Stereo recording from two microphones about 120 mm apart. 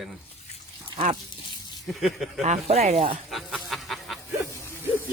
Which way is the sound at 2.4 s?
55° right (ahead or behind).